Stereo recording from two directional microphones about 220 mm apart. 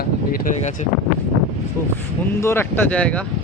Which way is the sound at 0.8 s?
30° left (ahead or behind).